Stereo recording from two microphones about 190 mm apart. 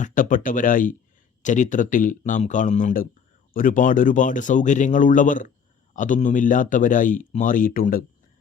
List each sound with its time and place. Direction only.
0.0 s speech: 45° left (ahead or behind)